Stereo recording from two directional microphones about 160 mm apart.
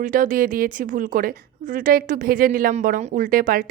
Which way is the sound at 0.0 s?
55° right (ahead or behind).